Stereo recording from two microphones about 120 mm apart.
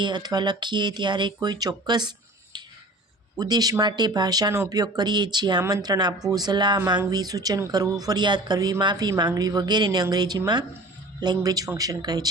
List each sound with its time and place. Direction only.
0.0 s speech: 35° right (ahead or behind)